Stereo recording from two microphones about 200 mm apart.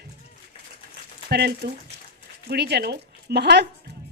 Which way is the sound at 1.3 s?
55° right (ahead or behind).